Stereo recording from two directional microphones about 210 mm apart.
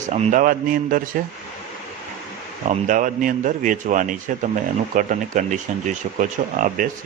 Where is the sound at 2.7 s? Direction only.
40° right (ahead or behind).